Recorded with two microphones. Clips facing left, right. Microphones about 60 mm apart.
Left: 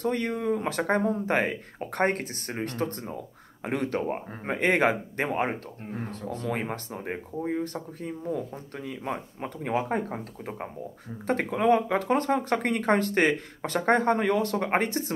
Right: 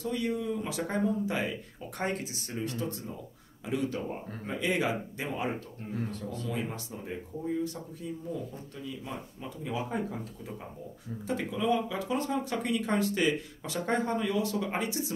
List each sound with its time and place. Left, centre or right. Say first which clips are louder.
0.0 s speech: left 4 dB; left